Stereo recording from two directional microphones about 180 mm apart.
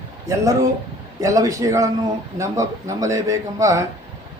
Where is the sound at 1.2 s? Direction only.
20° right (ahead or behind).